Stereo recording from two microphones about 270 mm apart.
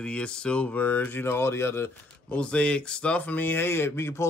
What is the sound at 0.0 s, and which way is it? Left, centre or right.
Speech, centre.